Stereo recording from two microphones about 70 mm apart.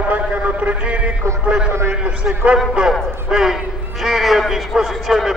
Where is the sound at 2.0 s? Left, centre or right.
Centre.